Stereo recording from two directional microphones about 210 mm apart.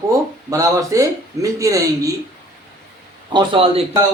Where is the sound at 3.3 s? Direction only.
25° right (ahead or behind).